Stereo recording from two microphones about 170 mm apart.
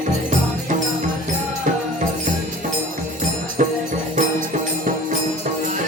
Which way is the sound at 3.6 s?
45° right (ahead or behind).